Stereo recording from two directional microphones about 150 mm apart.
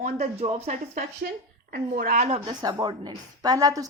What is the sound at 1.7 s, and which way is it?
Speech, 80° right.